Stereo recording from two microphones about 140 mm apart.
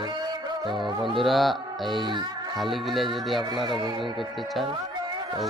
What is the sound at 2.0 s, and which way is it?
Music, 35° right (ahead or behind).